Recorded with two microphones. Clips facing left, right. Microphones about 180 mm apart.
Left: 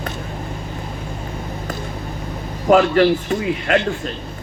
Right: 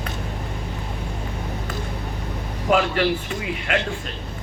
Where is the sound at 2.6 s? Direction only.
40° left (ahead or behind).